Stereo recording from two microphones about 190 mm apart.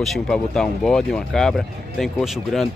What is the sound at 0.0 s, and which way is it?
Speech, centre (ahead or behind).